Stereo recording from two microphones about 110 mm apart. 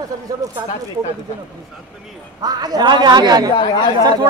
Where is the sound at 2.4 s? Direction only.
35° right (ahead or behind).